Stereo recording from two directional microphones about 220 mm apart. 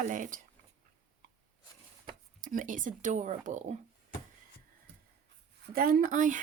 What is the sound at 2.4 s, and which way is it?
Speech, 40° right (ahead or behind).